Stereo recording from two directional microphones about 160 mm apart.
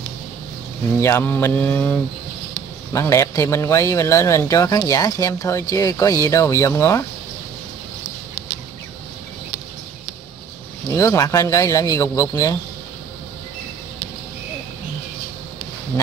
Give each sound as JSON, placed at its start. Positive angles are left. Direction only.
{"t": 1.0, "sound": "speech", "side_deg": 15}
{"t": 11.0, "sound": "speech", "side_deg": 20}